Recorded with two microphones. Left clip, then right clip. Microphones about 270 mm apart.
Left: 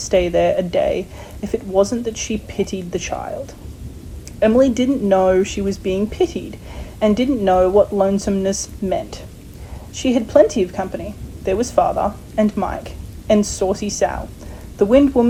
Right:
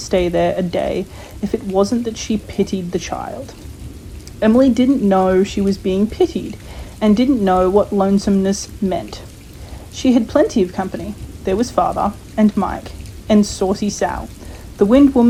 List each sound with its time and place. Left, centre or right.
0.0 s a woman's voice: centre